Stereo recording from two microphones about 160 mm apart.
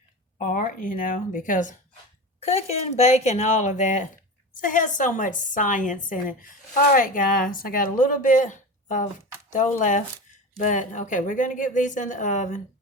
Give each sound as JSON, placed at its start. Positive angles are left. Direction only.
{"t": 0.3, "sound": "a woman's voice", "side_deg": 55}
{"t": 2.4, "sound": "a woman's voice", "side_deg": 40}